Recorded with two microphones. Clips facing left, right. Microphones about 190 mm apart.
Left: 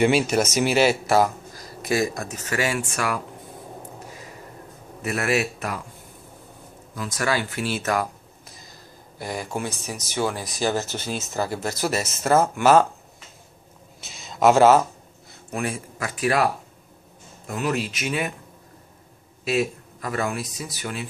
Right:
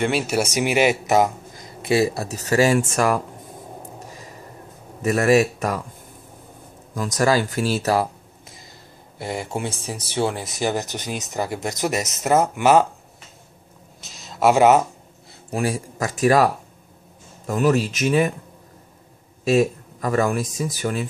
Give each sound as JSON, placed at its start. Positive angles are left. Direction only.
{"t": 0.3, "sound": "speech", "side_deg": -10}
{"t": 5.0, "sound": "speech", "side_deg": -40}
{"t": 7.0, "sound": "speech", "side_deg": -40}
{"t": 14.0, "sound": "a sound", "side_deg": 0}
{"t": 14.5, "sound": "speech", "side_deg": -15}
{"t": 15.5, "sound": "speech", "side_deg": -35}
{"t": 17.5, "sound": "speech", "side_deg": -40}
{"t": 19.4, "sound": "speech", "side_deg": -40}